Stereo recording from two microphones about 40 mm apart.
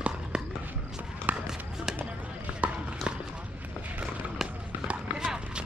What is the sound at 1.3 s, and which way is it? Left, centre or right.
Run, right.